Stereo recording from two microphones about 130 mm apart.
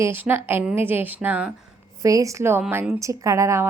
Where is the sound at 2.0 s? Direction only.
25° right (ahead or behind).